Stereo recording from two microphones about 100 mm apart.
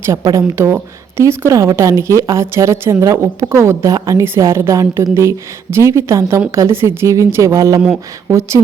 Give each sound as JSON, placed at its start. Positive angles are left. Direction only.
{"t": 0.0, "sound": "a woman's voice", "side_deg": -30}